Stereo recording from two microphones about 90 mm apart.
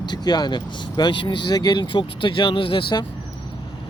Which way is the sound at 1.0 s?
60° left (ahead or behind).